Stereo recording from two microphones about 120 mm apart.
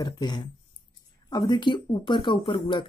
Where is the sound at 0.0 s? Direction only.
35° left (ahead or behind).